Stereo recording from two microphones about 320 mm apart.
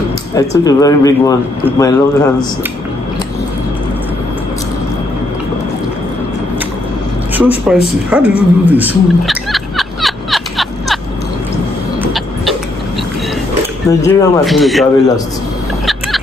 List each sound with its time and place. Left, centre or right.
0.5 s speech: centre
7.3 s speech: centre
8.1 s dog: centre
12.0 s vehicle: centre
13.8 s a man's voice: centre
15.8 s vehicle: centre